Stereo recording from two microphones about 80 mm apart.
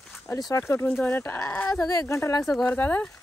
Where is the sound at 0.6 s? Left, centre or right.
Left.